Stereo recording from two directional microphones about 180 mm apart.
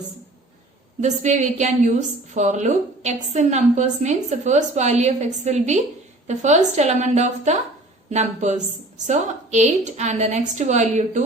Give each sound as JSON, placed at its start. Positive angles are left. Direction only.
{"t": 1.0, "sound": "a woman's voice", "side_deg": -40}